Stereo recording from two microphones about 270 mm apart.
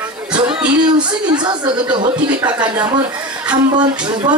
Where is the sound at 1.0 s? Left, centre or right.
Centre.